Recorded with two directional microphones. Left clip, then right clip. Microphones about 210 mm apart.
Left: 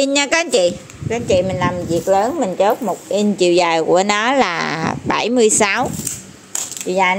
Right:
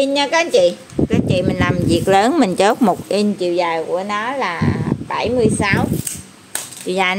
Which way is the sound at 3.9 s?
35° left (ahead or behind).